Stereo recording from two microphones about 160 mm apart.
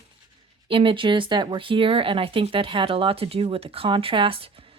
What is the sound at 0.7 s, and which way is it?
Speech, 30° right (ahead or behind).